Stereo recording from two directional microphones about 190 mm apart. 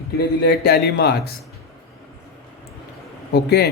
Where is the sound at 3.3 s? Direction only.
60° left (ahead or behind).